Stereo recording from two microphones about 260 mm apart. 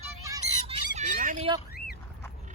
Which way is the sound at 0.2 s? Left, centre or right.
Centre.